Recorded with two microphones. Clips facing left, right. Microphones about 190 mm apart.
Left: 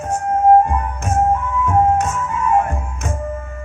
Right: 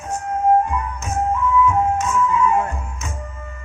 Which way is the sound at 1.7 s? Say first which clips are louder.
Left 3 dB; 50° left (ahead or behind).